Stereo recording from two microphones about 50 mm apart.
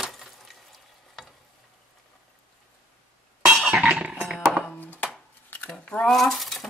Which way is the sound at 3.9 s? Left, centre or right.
Centre.